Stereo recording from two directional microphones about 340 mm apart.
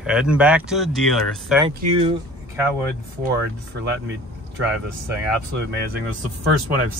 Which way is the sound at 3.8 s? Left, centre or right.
Right.